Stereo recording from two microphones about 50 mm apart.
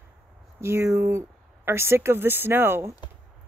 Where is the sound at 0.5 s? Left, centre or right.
Right.